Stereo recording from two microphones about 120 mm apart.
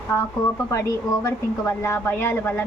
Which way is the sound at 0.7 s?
25° left (ahead or behind).